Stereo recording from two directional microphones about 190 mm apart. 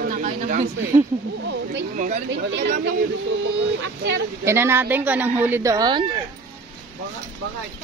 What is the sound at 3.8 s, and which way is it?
Speech, 60° right (ahead or behind).